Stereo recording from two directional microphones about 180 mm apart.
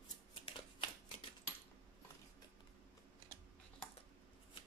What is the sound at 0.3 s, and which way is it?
Shuffling cards, 30° left (ahead or behind).